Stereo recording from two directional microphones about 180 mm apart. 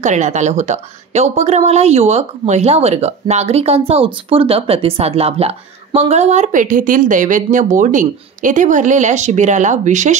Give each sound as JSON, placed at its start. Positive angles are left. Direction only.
{"t": 0.0, "sound": "a woman's voice", "side_deg": -40}